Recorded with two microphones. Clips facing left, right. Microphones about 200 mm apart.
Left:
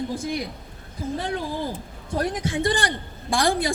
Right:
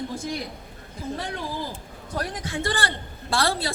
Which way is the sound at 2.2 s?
20° left (ahead or behind).